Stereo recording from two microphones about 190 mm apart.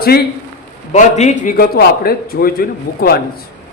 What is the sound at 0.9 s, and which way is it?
A woman's voice, 40° left (ahead or behind).